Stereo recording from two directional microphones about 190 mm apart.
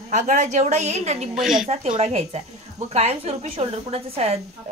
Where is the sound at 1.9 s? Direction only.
35° right (ahead or behind).